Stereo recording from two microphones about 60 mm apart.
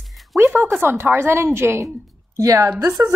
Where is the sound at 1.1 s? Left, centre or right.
Right.